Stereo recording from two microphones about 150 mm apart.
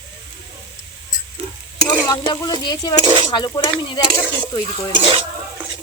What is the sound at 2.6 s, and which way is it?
Speech, 30° left (ahead or behind).